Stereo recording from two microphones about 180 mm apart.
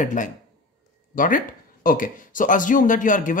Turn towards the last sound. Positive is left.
turn(degrees=45)  # may be behind; listen again after turning